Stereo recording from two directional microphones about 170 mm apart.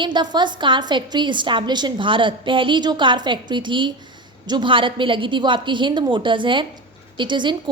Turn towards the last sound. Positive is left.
turn(degrees=-25)  # may be behind; listen again after turning